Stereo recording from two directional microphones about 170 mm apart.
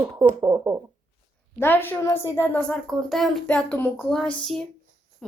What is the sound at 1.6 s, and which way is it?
A woman's voice, 10° left (ahead or behind).